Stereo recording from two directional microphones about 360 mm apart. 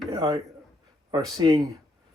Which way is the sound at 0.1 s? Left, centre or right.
Centre.